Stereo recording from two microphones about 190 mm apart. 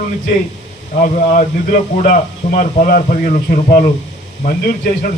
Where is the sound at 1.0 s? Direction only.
40° left (ahead or behind).